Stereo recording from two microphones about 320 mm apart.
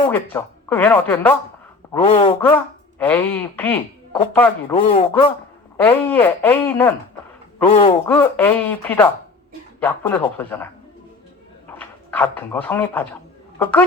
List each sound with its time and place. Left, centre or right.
0.0 s speech: centre
1.9 s speech: centre
3.0 s speech: centre
4.7 s speech: centre
5.7 s speech: centre
11.8 s a sound: centre
12.5 s speech: centre